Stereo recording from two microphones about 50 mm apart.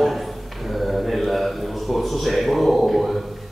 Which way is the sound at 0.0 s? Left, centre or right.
Centre.